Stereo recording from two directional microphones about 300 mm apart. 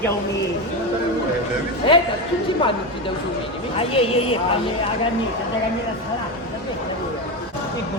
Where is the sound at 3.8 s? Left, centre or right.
Centre.